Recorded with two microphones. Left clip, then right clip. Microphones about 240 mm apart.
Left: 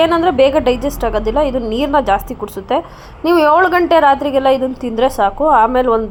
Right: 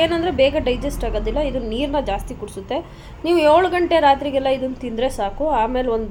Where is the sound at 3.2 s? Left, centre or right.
Centre.